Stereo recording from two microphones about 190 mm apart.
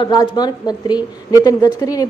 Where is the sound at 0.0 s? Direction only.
25° left (ahead or behind).